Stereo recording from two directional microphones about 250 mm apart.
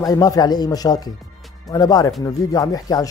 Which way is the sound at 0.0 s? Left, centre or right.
Centre.